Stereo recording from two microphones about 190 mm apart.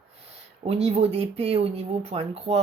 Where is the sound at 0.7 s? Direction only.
35° right (ahead or behind).